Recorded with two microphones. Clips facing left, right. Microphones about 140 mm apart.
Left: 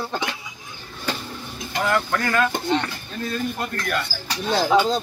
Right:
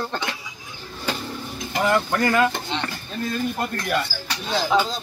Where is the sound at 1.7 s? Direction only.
15° right (ahead or behind).